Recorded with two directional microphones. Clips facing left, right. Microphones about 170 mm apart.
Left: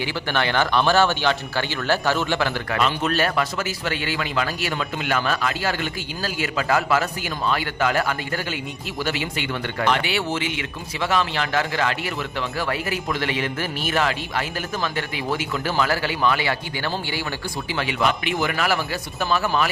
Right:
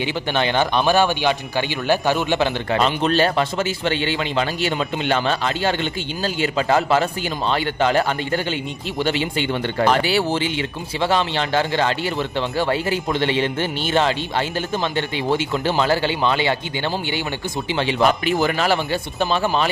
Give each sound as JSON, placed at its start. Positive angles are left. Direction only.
{"t": 0.0, "sound": "speech", "side_deg": -20}
{"t": 18.0, "sound": "speech", "side_deg": -40}